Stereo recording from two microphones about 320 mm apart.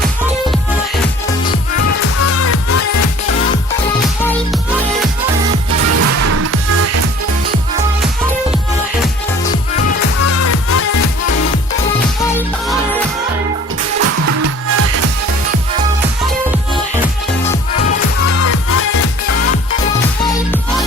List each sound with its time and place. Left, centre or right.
1.9 s music: left
5.9 s music: right
10.2 s music: left
14.0 s music: right
18.3 s music: left
20.2 s music: centre